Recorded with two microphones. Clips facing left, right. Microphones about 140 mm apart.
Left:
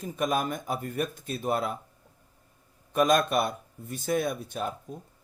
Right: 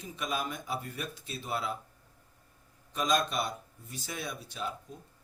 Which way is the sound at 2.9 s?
55° left (ahead or behind).